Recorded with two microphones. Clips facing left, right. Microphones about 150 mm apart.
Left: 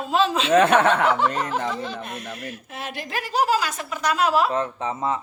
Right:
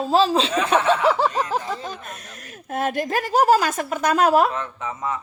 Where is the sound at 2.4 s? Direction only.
45° right (ahead or behind).